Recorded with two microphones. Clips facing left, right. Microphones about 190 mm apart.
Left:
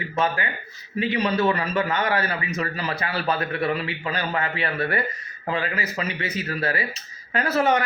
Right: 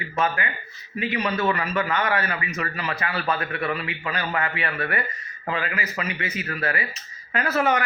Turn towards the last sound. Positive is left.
turn(degrees=35)  # may be behind; listen again after turning